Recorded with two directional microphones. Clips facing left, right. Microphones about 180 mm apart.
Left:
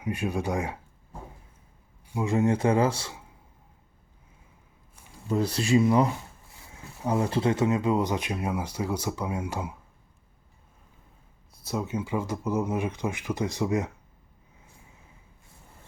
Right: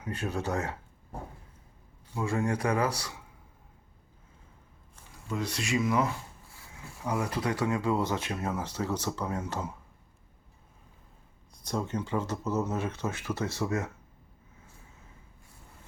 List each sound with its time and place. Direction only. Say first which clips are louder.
0.0 s speech: left 4 dB; 15° left (ahead or behind)
2.0 s speech: left 5 dB; 15° left (ahead or behind)
5.3 s speech: left 8 dB; 35° left (ahead or behind); by 9.7 s 10° left (ahead or behind)
11.5 s speech: left 2 dB; 5° left (ahead or behind)